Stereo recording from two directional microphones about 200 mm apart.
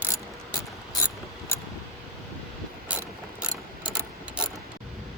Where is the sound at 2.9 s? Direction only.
5° right (ahead or behind).